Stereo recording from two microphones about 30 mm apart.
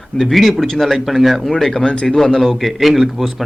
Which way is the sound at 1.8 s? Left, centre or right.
Left.